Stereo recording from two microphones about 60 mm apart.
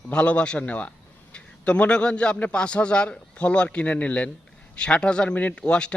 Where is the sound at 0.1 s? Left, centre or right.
Centre.